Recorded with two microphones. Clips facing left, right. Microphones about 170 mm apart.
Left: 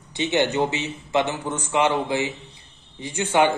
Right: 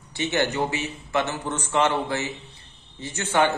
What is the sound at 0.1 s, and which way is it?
Speech, 20° left (ahead or behind).